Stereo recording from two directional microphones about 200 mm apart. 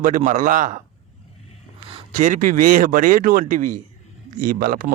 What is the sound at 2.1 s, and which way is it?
Speech, 40° right (ahead or behind).